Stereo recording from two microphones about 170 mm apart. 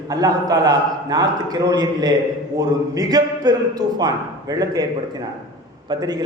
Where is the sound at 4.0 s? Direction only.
20° right (ahead or behind).